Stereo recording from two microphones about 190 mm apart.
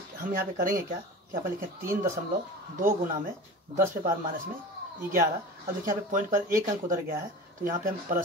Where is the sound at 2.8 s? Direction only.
45° right (ahead or behind).